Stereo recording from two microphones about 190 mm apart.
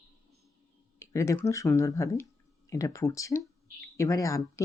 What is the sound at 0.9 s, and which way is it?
Speech, 15° left (ahead or behind).